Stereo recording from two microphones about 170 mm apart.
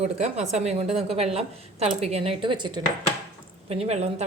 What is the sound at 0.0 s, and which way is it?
A woman's voice, 40° right (ahead or behind).